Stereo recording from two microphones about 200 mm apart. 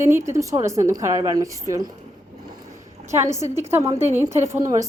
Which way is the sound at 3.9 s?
30° right (ahead or behind).